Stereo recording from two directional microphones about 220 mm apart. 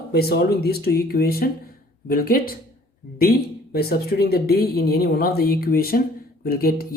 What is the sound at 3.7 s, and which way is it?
Speech, 45° left (ahead or behind).